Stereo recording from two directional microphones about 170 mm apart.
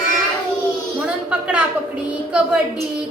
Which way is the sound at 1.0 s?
5° right (ahead or behind).